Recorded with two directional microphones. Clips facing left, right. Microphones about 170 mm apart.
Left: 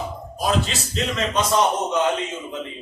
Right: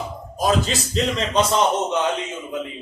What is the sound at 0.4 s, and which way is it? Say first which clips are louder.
Speech: right 3 dB; 35° right (ahead or behind).